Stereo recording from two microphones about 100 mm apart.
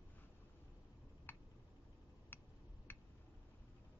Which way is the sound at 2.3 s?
20° left (ahead or behind).